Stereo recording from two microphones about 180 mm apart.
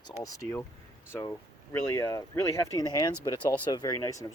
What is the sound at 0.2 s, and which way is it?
Speech, 20° left (ahead or behind).